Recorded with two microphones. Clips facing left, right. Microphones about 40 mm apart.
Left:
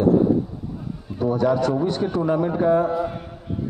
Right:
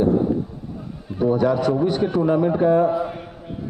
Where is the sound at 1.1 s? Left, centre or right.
Centre.